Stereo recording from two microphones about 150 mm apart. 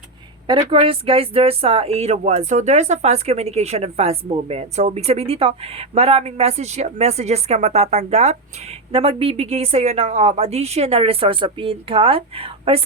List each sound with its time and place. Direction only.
0.4 s speech: 35° right (ahead or behind)